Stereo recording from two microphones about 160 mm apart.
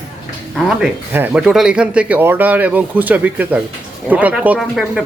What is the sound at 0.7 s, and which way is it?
A man's voice, 10° right (ahead or behind).